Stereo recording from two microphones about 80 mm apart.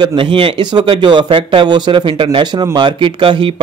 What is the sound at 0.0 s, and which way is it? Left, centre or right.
Speech, right.